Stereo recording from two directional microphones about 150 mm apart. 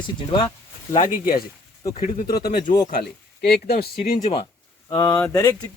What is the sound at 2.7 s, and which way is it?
Speech, 70° left (ahead or behind).